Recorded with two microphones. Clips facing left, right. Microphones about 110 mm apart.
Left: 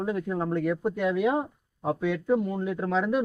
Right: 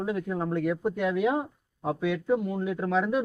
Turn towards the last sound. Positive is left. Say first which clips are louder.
# even
turn(degrees=0)  # may be behind; listen again after turning